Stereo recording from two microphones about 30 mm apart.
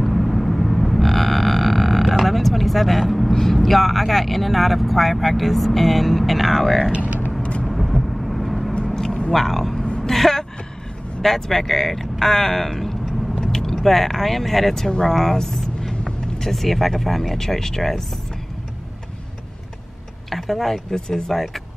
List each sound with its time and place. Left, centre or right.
0.0 s vehicle: centre
3.5 s speech: centre
7.6 s vehicle: centre
8.9 s a sound: left
9.3 s vehicle: centre
10.0 s a sound: centre
11.2 s speech: centre
16.5 s speech: centre
20.2 s speech: centre